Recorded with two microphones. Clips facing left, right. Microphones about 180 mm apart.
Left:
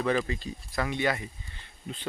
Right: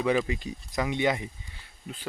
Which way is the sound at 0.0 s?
10° right (ahead or behind).